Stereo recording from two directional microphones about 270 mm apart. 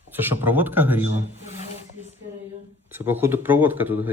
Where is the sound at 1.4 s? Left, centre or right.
Right.